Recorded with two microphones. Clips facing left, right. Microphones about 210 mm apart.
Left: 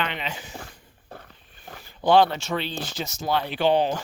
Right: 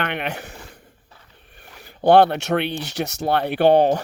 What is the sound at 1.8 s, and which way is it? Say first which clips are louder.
Speech: right 4 dB; 60° right (ahead or behind).